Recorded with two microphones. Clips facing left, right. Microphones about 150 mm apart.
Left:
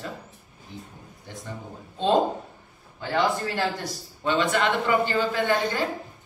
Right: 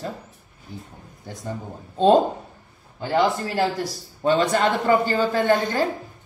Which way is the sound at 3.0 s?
35° right (ahead or behind).